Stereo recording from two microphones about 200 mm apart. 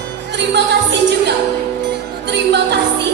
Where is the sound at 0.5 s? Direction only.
60° right (ahead or behind).